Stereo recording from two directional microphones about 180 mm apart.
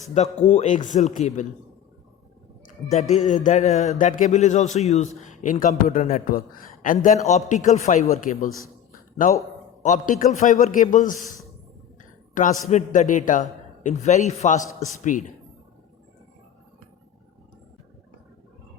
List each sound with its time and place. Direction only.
0.1 s a man's voice: 40° left (ahead or behind)
2.6 s a man's voice: 40° left (ahead or behind)
9.2 s a man's voice: 50° left (ahead or behind)
12.3 s a man's voice: 45° left (ahead or behind)